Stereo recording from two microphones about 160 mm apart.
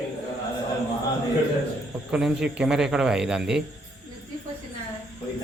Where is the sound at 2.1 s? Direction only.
5° right (ahead or behind).